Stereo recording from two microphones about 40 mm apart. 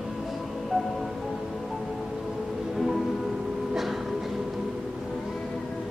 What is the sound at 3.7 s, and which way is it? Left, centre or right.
Train, centre.